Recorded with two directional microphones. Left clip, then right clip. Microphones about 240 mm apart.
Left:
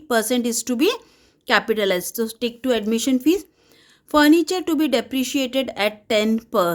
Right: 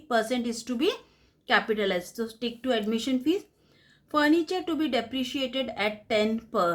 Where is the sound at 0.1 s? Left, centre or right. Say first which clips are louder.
Left 6 dB; left.